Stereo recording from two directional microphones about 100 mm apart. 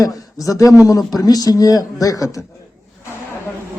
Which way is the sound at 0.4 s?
35° left (ahead or behind).